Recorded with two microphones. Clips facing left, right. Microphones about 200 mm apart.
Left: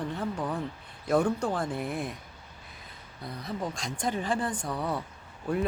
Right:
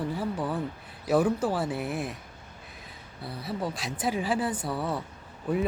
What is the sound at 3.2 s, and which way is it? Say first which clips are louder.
Speech: right 2 dB; 5° right (ahead or behind).